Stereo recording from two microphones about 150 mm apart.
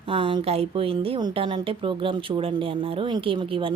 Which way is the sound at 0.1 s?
35° right (ahead or behind).